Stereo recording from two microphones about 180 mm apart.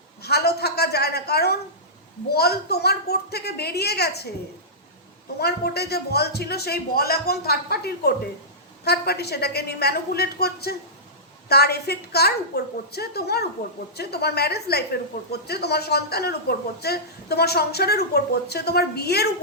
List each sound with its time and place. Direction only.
0.2 s a sound: 60° left (ahead or behind)
2.3 s speech: 60° left (ahead or behind)
5.4 s speech: 60° left (ahead or behind)